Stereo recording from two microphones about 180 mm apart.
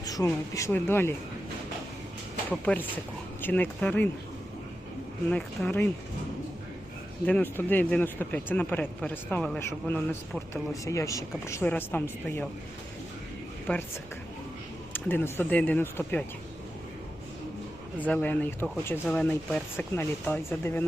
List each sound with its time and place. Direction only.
0.0 s a sound: 20° left (ahead or behind)
0.5 s a man's voice: 15° left (ahead or behind)
2.5 s a man's voice: 10° left (ahead or behind)
5.3 s a man's voice: 5° left (ahead or behind)
7.3 s a man's voice: 10° left (ahead or behind)
13.7 s a man's voice: 5° left (ahead or behind)
14.9 s a man's voice: 10° left (ahead or behind)
18.0 s a man's voice: 10° left (ahead or behind)